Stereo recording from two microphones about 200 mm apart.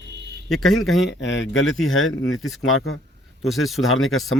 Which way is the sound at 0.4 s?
Centre (ahead or behind).